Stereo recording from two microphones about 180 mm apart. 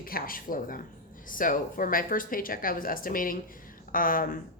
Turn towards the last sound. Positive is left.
turn(degrees=50)  # may be behind; listen again after turning